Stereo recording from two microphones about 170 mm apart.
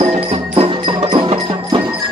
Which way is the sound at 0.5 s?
30° right (ahead or behind).